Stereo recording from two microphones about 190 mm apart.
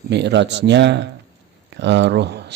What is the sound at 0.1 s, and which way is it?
A man's voice, 65° right (ahead or behind).